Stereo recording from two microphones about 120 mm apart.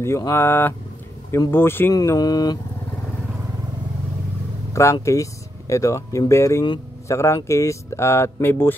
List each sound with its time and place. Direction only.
0.0 s speech: 20° left (ahead or behind)
2.0 s mantra: 30° left (ahead or behind)
5.0 s speech: 25° left (ahead or behind)